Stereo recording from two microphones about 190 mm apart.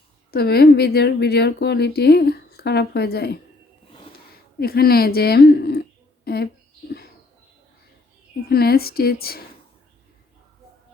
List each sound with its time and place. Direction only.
0.3 s a woman's voice: 55° left (ahead or behind)
4.6 s a woman's voice: 55° left (ahead or behind)
8.4 s a woman's voice: 55° left (ahead or behind)